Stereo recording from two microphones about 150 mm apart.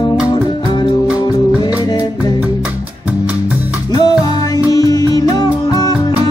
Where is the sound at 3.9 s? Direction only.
25° left (ahead or behind).